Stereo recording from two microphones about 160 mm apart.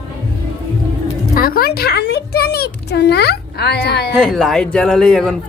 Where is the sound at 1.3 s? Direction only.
65° left (ahead or behind); by 4.1 s 90° left.